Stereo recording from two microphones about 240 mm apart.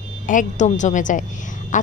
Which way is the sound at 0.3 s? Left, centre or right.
Left.